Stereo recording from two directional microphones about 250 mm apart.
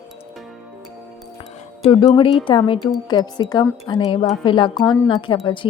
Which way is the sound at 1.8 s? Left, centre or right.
Left.